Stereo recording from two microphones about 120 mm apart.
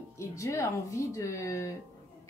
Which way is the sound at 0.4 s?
25° left (ahead or behind).